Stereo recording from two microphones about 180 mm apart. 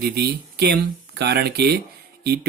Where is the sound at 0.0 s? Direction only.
65° right (ahead or behind).